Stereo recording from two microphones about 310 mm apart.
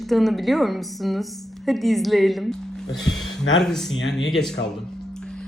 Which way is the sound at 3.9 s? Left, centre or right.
Left.